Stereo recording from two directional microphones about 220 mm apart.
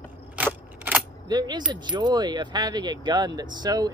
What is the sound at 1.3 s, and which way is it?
Speech, 20° right (ahead or behind).